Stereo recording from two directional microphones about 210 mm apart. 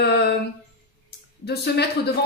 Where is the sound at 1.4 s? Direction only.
50° left (ahead or behind).